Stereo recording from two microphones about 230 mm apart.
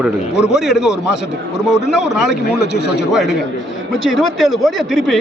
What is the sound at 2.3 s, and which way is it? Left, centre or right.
Speech, left.